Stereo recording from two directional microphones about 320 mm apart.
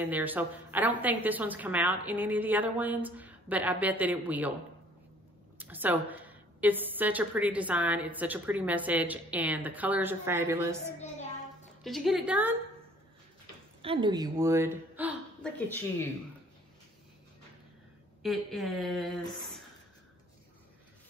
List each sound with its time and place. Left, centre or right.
0.0 s a woman's voice: centre
5.6 s a woman's voice: centre
11.8 s a woman's voice: centre
13.8 s a woman's voice: centre
18.2 s a woman's voice: centre